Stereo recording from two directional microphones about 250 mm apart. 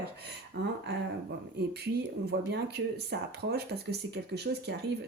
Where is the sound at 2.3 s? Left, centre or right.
Right.